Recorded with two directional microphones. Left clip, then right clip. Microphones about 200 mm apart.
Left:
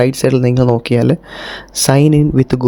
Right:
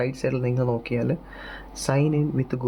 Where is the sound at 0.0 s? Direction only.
45° left (ahead or behind).